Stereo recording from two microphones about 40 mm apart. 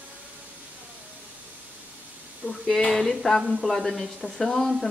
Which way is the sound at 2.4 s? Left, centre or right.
Left.